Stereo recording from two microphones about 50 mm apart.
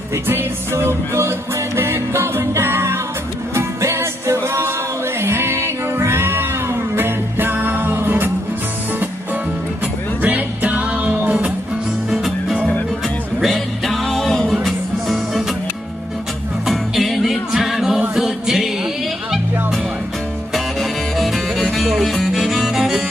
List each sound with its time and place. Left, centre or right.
0.3 s music: right
10.2 s music: right
13.4 s music: centre
16.6 s music: centre
18.1 s a capella: centre
20.5 s music: centre